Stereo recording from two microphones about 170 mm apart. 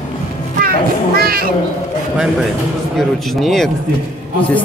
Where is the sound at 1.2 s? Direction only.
60° right (ahead or behind).